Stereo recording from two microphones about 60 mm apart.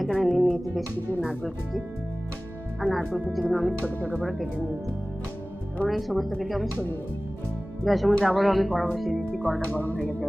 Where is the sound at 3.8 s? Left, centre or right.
Left.